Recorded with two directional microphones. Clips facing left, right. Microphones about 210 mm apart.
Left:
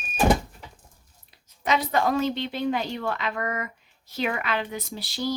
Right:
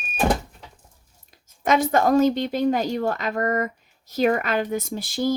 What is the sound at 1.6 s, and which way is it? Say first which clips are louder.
Speech: right 5 dB; 45° right (ahead or behind).